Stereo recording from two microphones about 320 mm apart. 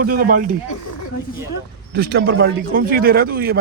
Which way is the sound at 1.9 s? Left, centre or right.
Right.